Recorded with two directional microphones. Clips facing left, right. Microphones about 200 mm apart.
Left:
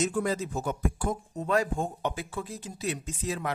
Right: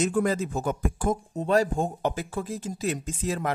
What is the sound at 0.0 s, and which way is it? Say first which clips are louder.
Speech: right 4 dB; 55° right (ahead or behind).